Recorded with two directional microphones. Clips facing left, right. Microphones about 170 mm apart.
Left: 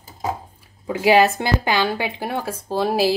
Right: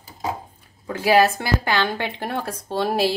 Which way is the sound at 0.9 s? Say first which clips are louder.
Left 2 dB; 15° left (ahead or behind).